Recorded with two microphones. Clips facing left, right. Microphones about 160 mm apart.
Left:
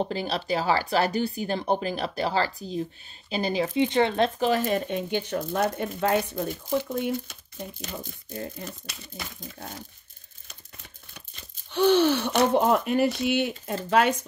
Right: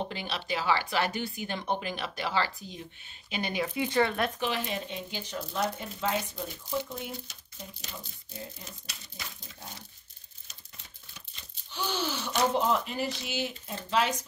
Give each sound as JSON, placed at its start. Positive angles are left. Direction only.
{"t": 0.0, "sound": "speech", "side_deg": 40}
{"t": 4.4, "sound": "speech", "side_deg": 45}
{"t": 11.7, "sound": "speech", "side_deg": 60}